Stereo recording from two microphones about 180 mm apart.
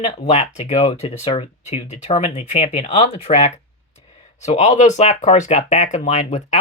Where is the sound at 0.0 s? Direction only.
40° left (ahead or behind).